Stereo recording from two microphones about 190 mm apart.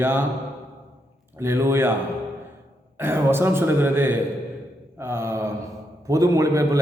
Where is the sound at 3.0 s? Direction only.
10° right (ahead or behind).